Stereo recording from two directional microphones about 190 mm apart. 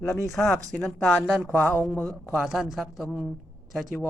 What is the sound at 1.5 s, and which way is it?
A man's voice, 10° left (ahead or behind).